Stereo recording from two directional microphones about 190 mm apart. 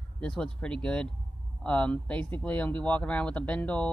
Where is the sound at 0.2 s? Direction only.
5° left (ahead or behind).